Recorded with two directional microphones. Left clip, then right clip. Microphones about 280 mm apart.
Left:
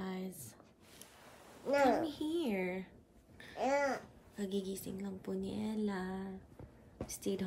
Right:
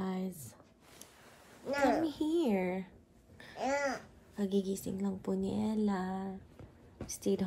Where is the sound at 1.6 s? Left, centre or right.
Centre.